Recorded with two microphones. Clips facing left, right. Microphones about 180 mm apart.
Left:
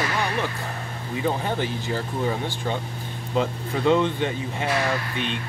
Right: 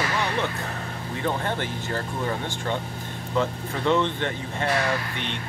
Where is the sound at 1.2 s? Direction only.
10° left (ahead or behind).